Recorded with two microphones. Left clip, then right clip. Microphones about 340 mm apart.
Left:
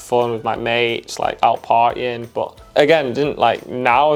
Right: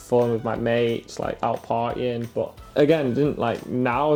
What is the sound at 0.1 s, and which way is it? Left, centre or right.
Speech, left.